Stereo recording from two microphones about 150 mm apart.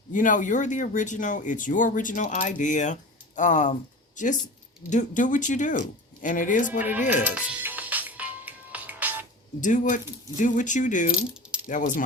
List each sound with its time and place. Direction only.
0.1 s speech: 60° left (ahead or behind)
7.3 s music: 10° right (ahead or behind)
9.6 s speech: 60° left (ahead or behind)